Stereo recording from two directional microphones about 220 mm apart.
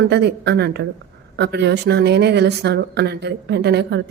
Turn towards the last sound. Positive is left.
turn(degrees=-50)  # may be behind; listen again after turning